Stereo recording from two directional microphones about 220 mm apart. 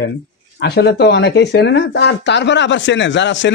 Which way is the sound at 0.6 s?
45° left (ahead or behind).